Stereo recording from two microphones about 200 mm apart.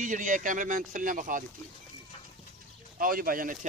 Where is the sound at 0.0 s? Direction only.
40° right (ahead or behind).